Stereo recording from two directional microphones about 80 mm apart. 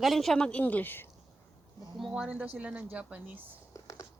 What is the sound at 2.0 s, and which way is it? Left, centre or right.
Speech, centre.